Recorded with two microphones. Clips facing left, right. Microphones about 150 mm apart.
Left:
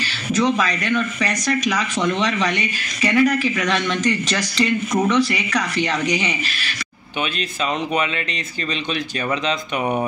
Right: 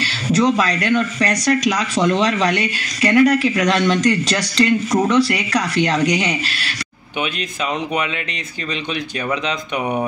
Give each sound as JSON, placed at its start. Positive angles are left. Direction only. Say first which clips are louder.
{"t": 0.0, "sound": "speech", "louder": "right 3 dB", "side_deg": -35}